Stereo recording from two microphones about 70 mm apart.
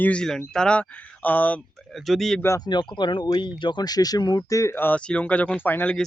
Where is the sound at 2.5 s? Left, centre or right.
Left.